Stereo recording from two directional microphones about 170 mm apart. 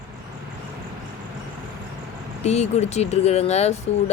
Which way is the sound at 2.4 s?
40° left (ahead or behind).